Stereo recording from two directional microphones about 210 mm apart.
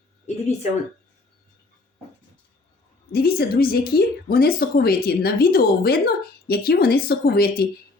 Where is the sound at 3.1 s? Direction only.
45° left (ahead or behind).